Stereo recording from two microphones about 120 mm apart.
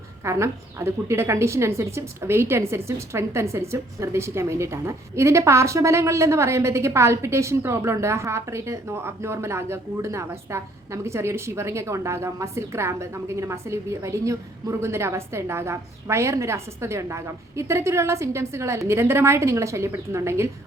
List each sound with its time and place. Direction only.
0.3 s a woman's voice: 25° right (ahead or behind)